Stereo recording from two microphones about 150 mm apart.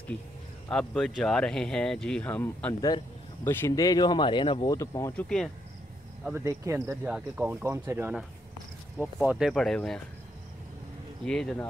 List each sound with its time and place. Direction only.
0.7 s speech: 5° left (ahead or behind); by 5.1 s 25° left (ahead or behind)
5.1 s speech: 5° left (ahead or behind)
6.3 s speech: 15° right (ahead or behind)
7.1 s speech: 5° right (ahead or behind)
8.9 s speech: 5° right (ahead or behind)
11.2 s speech: 5° left (ahead or behind)